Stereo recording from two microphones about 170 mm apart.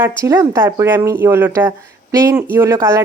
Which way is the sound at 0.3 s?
15° right (ahead or behind).